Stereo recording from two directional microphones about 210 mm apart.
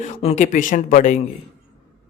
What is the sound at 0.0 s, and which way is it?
Speech, 30° left (ahead or behind).